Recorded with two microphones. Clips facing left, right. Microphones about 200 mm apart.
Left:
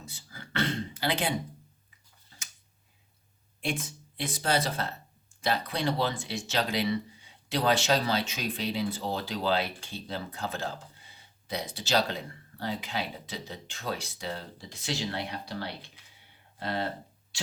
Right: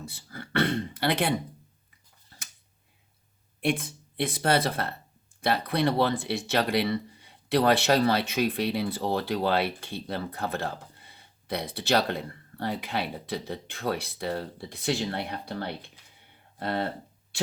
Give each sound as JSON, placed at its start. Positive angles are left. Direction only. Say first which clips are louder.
{"t": 0.0, "sound": "beatboxing", "louder": "right 6 dB", "side_deg": -60}
{"t": 3.6, "sound": "speech", "louder": "right 6 dB", "side_deg": -60}